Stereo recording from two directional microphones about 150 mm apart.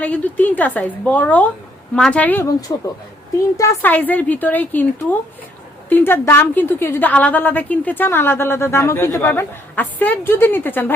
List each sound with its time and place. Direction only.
0.0 s a woman's voice: 10° left (ahead or behind)
2.7 s speech: 25° left (ahead or behind)
3.6 s a woman's voice: 10° left (ahead or behind)
5.9 s a woman's voice: 15° left (ahead or behind)